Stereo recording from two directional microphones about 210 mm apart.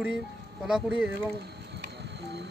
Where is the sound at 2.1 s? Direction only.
55° right (ahead or behind).